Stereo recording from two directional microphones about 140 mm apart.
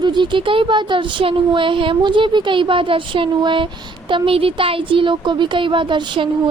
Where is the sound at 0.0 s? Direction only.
35° right (ahead or behind).